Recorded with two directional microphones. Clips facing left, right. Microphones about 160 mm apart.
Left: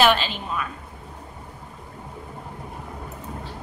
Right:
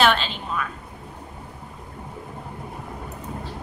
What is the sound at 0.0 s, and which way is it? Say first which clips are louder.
Speech: left 1 dB; 5° left (ahead or behind).